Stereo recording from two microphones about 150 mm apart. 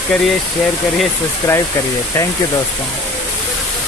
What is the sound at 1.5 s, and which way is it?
Speech, 15° left (ahead or behind).